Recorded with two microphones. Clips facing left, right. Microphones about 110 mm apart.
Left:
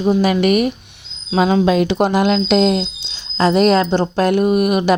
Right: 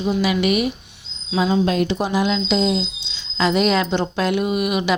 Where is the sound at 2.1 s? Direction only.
55° left (ahead or behind).